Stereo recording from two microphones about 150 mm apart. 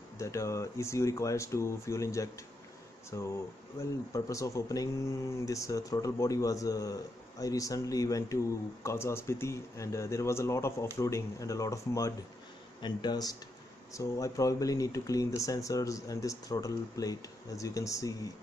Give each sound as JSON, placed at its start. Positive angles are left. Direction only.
{"t": 0.2, "sound": "speech", "side_deg": 20}